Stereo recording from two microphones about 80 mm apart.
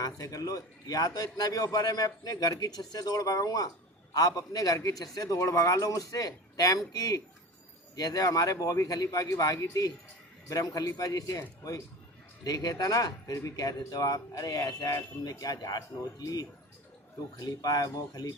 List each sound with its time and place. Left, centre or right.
0.0 s a man's voice: left